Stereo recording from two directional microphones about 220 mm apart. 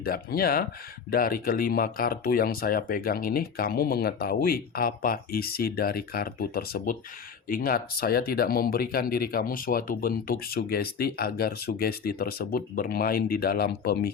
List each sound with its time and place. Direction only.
0.0 s speech: 45° left (ahead or behind)